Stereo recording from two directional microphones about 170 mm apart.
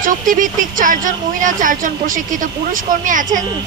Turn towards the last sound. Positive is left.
turn(degrees=-50)  # may be behind; listen again after turning